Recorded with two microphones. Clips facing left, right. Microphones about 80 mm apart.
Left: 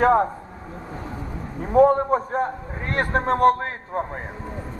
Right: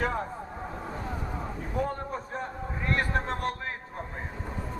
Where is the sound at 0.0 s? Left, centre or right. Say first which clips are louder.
Left 13 dB; left.